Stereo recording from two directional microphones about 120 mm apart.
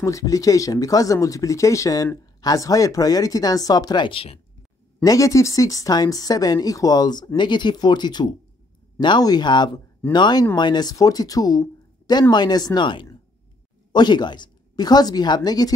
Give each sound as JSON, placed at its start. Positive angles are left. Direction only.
{"t": 0.0, "sound": "speech", "side_deg": 30}
{"t": 5.0, "sound": "speech", "side_deg": 25}